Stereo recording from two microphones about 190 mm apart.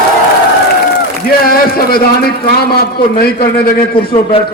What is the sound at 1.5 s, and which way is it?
A man's voice, 55° left (ahead or behind).